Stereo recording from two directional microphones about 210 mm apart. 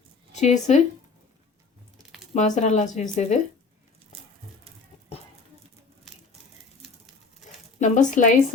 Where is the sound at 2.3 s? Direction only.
35° left (ahead or behind).